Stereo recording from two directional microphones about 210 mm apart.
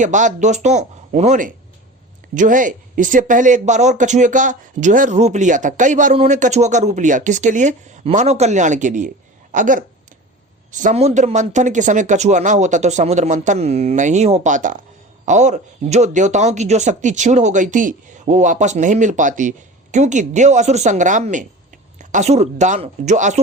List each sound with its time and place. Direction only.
0.0 s speech: 35° right (ahead or behind)